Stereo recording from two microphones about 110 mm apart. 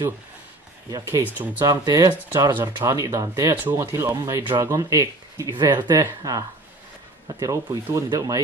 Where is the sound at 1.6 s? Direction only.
40° right (ahead or behind).